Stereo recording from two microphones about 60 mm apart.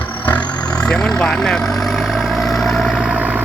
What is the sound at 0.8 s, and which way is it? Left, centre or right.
Speech, centre.